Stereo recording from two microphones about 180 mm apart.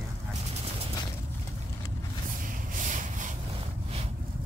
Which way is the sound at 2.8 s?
45° right (ahead or behind).